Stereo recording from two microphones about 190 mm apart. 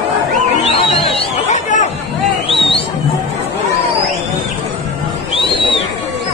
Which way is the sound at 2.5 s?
30° left (ahead or behind).